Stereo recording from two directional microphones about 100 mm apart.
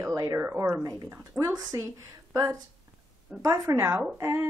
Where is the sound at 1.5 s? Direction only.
40° right (ahead or behind).